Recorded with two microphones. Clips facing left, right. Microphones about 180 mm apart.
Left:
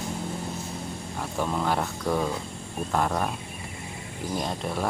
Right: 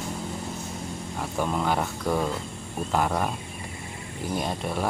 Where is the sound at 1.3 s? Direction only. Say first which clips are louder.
Right 1 dB; centre (ahead or behind).